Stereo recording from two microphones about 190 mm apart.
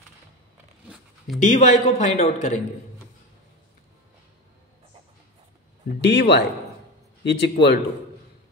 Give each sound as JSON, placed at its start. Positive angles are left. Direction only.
{"t": 0.8, "sound": "dog", "side_deg": 0}
{"t": 1.4, "sound": "speech", "side_deg": 40}
{"t": 5.9, "sound": "a man's voice", "side_deg": 60}